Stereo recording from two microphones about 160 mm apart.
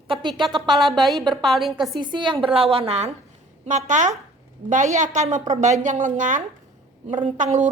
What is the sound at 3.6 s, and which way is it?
A woman's voice, 50° right (ahead or behind).